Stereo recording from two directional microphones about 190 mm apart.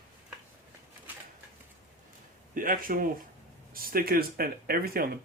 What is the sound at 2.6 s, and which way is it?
Speech, 45° right (ahead or behind).